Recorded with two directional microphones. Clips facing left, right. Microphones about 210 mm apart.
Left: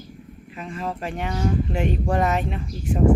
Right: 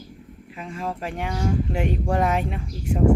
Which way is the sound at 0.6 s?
10° right (ahead or behind).